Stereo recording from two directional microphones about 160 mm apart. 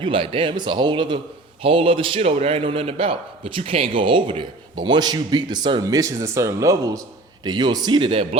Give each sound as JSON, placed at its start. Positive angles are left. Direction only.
{"t": 0.0, "sound": "a man's voice", "side_deg": -35}